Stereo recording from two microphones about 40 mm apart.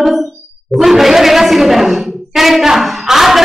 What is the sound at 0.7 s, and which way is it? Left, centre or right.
Speech, centre.